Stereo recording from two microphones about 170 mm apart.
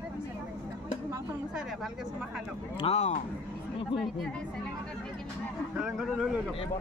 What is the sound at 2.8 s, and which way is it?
Speech, 40° left (ahead or behind).